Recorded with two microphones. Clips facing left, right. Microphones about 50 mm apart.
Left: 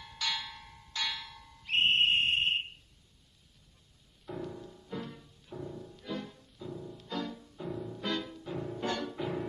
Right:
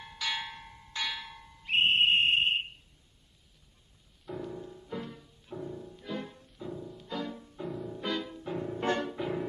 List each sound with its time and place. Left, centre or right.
0.4 s music: right
0.7 s music: centre
1.1 s a sound: right
1.7 s whistle: centre
4.3 s music: centre
7.2 s music: centre
7.6 s music: centre
8.7 s music: right
9.1 s music: centre